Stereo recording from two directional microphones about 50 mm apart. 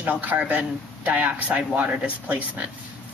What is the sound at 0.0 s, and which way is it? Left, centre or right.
A woman's voice, right.